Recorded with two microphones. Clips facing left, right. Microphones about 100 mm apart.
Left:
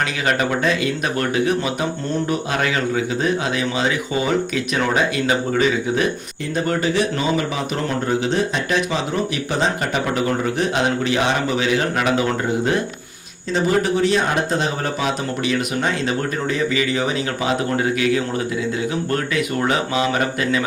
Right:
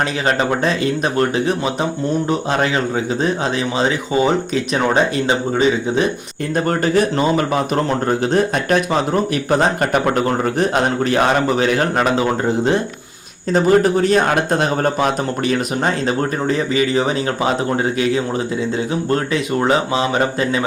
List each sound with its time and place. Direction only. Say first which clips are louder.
0.3 s speech: right 1 dB; 30° right (ahead or behind)
6.7 s speech: right 3 dB; 45° right (ahead or behind)
13.5 s speech: right 5 dB; 40° right (ahead or behind)